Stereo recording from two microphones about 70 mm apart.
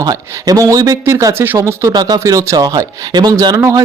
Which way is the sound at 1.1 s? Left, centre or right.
Right.